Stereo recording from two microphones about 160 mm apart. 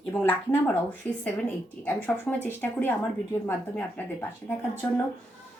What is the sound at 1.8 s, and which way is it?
Speech, 10° left (ahead or behind).